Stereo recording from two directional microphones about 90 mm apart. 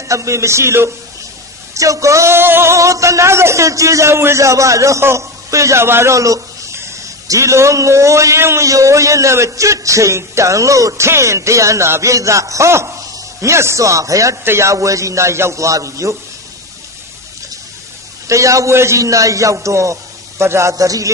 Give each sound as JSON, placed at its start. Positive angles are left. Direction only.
{"t": 0.1, "sound": "speech", "side_deg": -35}
{"t": 18.2, "sound": "speech", "side_deg": -35}